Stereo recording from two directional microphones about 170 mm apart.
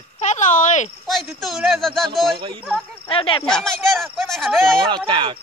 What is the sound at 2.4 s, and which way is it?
Speech, 30° right (ahead or behind).